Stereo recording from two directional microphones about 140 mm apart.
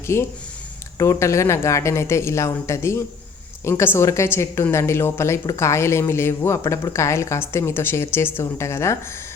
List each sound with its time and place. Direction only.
0.1 s a woman's voice: 20° left (ahead or behind)